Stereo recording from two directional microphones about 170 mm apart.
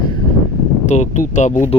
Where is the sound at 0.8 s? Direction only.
45° left (ahead or behind).